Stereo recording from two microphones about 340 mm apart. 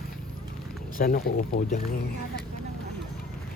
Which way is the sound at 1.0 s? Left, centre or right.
Left.